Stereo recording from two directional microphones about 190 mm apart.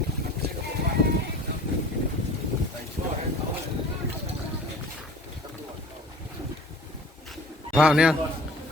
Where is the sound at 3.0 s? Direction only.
45° right (ahead or behind).